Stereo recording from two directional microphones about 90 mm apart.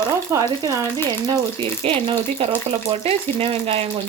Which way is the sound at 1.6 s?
90° right.